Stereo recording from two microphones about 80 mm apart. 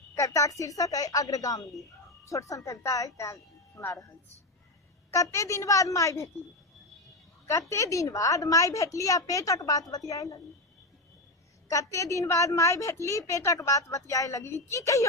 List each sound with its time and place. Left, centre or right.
0.2 s a woman's voice: left
5.1 s a woman's voice: left
7.7 s a woman's voice: left
11.7 s a woman's voice: left